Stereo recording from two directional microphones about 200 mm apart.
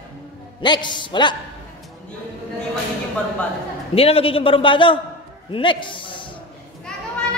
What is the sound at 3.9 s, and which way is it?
A man's voice, 30° left (ahead or behind).